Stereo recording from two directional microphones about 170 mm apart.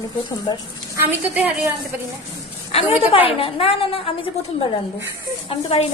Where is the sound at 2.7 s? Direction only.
35° left (ahead or behind).